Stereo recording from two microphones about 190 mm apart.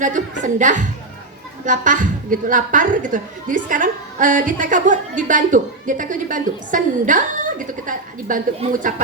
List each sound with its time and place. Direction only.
0.0 s a woman's voice: 40° right (ahead or behind)